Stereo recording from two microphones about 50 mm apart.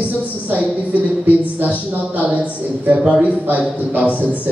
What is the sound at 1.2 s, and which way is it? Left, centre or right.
A man's voice, right.